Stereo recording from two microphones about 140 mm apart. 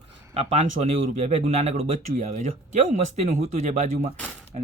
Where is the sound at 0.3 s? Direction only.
50° right (ahead or behind).